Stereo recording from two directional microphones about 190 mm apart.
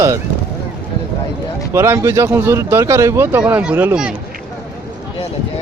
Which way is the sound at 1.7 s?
15° right (ahead or behind).